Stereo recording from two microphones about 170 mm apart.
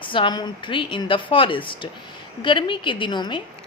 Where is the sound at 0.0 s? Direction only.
30° left (ahead or behind).